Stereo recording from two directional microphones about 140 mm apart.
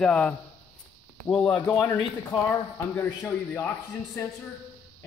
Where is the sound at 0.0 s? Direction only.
5° left (ahead or behind).